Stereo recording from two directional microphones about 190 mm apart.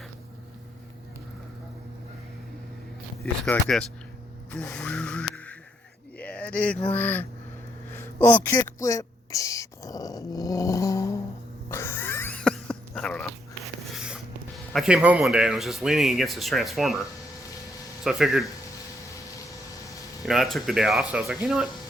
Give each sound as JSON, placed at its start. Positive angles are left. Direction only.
{"t": 3.4, "sound": "speech", "side_deg": 5}
{"t": 4.5, "sound": "vehicle", "side_deg": 5}
{"t": 6.1, "sound": "a sound", "side_deg": 5}
{"t": 6.8, "sound": "speech", "side_deg": 10}
{"t": 7.9, "sound": "whispering", "side_deg": 10}
{"t": 11.7, "sound": "a sound", "side_deg": 10}
{"t": 13.9, "sound": "speech", "side_deg": 0}
{"t": 18.0, "sound": "speech", "side_deg": 0}
{"t": 20.2, "sound": "speech", "side_deg": 0}